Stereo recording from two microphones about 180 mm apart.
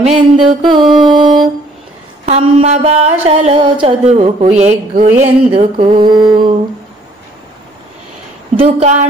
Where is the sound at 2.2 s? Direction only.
35° right (ahead or behind).